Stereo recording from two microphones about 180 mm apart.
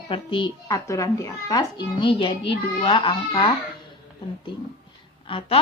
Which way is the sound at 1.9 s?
30° left (ahead or behind).